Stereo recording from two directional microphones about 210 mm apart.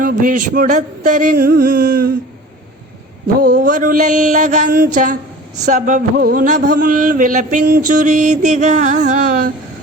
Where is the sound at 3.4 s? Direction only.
45° right (ahead or behind).